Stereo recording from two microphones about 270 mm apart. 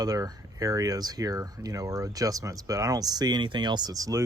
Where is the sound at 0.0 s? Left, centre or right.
Centre.